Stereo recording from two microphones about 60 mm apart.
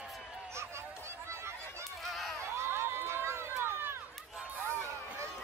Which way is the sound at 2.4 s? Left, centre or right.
Right.